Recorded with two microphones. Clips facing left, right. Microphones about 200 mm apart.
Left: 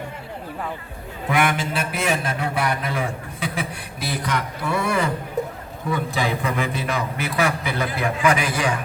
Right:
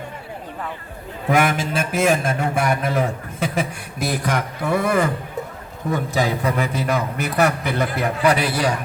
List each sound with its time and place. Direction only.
1.3 s a man's voice: 45° right (ahead or behind)